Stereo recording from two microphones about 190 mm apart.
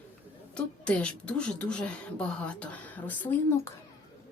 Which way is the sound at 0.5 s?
5° left (ahead or behind).